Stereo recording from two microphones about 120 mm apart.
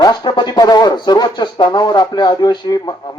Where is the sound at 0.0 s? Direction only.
35° left (ahead or behind).